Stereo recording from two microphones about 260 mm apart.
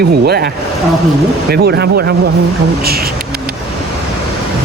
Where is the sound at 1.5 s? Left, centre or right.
Right.